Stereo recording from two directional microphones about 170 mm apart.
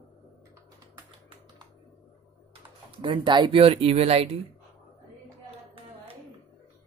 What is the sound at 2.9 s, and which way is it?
Speech, 30° right (ahead or behind).